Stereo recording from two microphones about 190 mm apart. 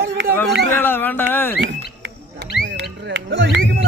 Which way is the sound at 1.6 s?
70° right (ahead or behind).